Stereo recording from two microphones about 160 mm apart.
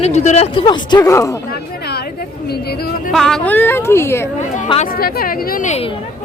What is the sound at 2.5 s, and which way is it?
Speech, 80° left.